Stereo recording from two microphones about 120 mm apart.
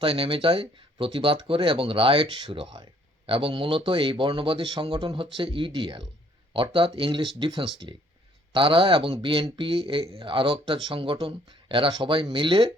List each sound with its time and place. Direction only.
0.0 s speech: 50° right (ahead or behind)